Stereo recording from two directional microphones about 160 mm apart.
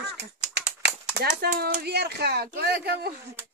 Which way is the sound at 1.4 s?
75° right (ahead or behind).